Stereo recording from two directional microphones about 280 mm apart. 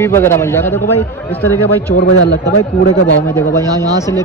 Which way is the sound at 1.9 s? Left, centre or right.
Left.